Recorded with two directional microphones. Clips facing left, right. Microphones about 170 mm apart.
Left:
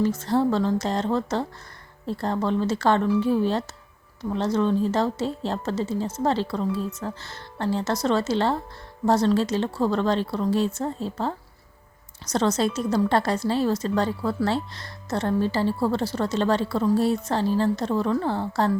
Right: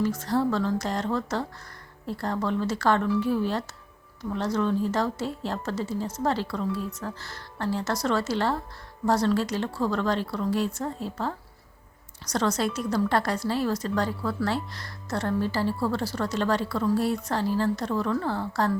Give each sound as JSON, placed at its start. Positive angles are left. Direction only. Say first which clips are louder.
{"t": 0.0, "sound": "a woman's voice", "louder": "left 3 dB", "side_deg": 25}